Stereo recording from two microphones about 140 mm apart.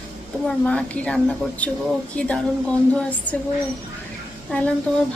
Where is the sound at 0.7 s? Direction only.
10° left (ahead or behind).